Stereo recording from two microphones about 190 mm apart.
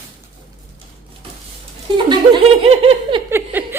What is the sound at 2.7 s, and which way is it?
Giggle, 30° right (ahead or behind).